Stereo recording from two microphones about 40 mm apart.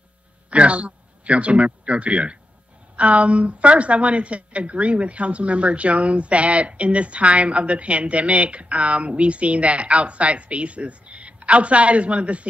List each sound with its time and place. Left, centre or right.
0.5 s a woman's voice: right